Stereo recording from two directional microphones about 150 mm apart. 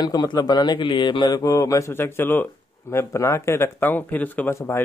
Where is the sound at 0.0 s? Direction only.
25° left (ahead or behind).